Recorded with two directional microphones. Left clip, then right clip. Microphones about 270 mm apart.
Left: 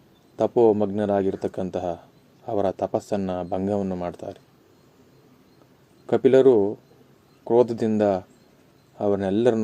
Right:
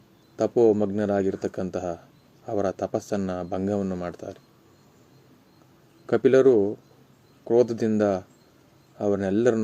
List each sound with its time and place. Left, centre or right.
0.3 s a man's voice: centre
6.1 s a man's voice: centre